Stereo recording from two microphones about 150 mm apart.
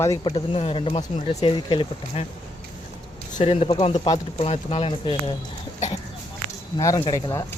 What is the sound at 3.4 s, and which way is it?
Speech, 40° left (ahead or behind).